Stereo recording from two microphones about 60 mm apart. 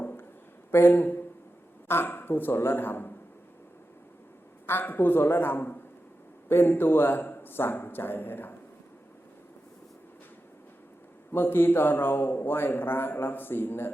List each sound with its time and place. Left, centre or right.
0.0 s a sound: left
0.7 s a man's voice: left
4.6 s a man's voice: left
11.3 s a man's voice: left